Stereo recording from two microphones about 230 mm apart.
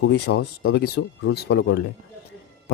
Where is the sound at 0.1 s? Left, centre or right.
Left.